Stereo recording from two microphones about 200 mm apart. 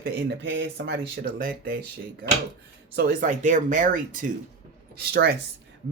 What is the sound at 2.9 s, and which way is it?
Speech, 45° right (ahead or behind).